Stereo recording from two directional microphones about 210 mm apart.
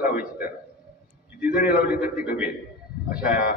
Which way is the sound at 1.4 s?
45° left (ahead or behind).